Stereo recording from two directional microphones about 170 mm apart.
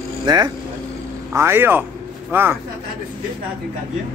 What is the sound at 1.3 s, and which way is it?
Speech, 15° right (ahead or behind).